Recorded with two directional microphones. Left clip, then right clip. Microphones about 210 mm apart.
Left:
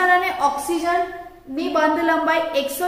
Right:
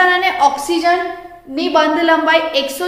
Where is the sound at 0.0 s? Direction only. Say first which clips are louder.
Right 5 dB; 35° right (ahead or behind).